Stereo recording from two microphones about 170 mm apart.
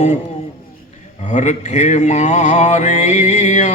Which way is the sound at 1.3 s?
45° left (ahead or behind).